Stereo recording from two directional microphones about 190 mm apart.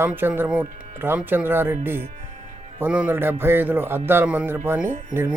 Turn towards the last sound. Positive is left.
turn(degrees=-10)  # may be behind; listen again after turning